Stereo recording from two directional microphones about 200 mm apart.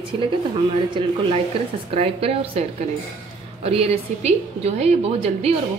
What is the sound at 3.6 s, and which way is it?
A woman's voice, 30° right (ahead or behind).